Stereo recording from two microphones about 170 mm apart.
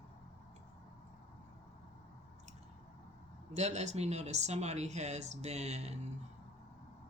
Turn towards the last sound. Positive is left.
turn(degrees=-40)  # may be behind; listen again after turning